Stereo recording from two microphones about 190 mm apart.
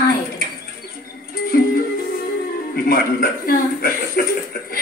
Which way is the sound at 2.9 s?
50° left (ahead or behind).